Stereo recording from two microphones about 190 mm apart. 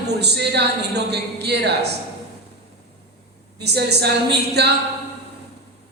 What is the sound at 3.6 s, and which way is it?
A woman's voice, 60° right (ahead or behind).